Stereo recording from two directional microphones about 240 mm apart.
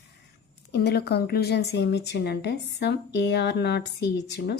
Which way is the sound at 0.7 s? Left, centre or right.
Left.